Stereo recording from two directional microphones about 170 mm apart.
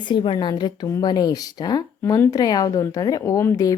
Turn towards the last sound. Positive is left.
turn(degrees=20)  # may be behind; listen again after turning